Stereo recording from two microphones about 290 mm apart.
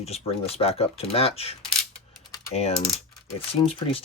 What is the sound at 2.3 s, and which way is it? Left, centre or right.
Typing, centre.